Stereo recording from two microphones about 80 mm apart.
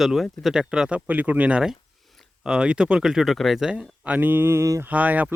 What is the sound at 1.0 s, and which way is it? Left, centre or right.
Speech, right.